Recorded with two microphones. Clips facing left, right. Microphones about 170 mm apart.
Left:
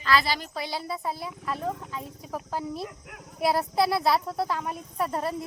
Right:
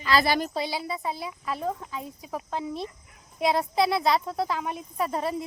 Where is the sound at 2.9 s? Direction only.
85° left.